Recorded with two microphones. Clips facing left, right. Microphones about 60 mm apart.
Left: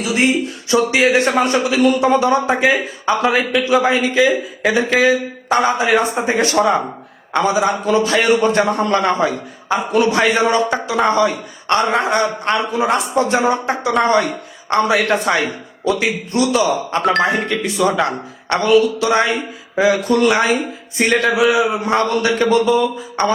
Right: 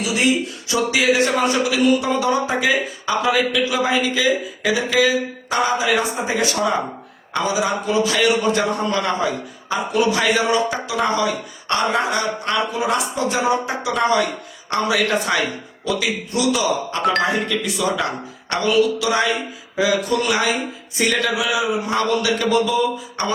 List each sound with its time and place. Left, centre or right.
0.0 s a man's voice: left